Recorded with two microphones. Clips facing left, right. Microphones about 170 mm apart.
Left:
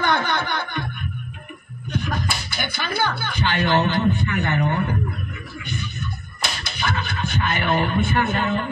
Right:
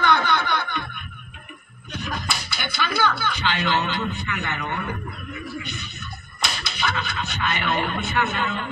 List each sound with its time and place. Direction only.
0.0 s snicker: 50° left (ahead or behind)
2.0 s speech: 45° left (ahead or behind)
6.6 s speech: 50° left (ahead or behind)